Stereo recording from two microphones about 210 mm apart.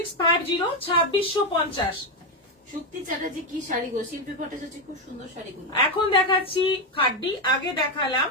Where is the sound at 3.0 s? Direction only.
40° right (ahead or behind).